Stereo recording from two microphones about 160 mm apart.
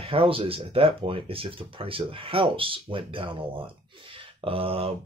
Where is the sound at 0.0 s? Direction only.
35° right (ahead or behind).